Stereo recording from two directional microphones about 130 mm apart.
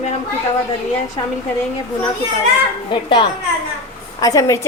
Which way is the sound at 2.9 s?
35° left (ahead or behind).